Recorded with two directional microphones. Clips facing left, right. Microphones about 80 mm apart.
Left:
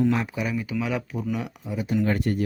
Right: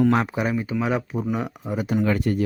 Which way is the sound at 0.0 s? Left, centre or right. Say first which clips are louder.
Right 4 dB; right.